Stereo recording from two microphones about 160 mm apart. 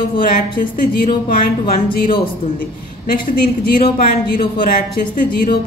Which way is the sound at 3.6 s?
70° left (ahead or behind).